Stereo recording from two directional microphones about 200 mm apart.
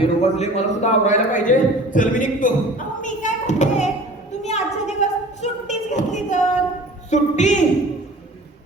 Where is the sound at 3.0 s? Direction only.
40° left (ahead or behind).